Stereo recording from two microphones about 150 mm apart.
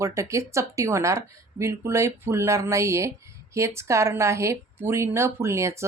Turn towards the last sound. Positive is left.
turn(degrees=-20)  # may be behind; listen again after turning